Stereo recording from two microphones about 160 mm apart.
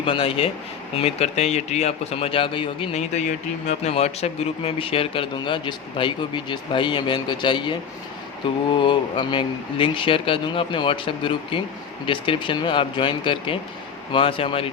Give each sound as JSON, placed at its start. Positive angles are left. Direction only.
{"t": 0.0, "sound": "a man's voice", "side_deg": 35}